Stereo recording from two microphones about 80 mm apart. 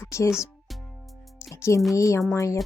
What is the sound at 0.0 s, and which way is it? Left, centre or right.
Music, left.